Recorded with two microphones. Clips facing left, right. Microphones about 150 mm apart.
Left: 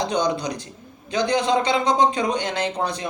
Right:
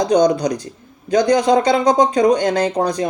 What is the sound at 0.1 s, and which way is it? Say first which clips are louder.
Speech: right 9 dB; 40° right (ahead or behind).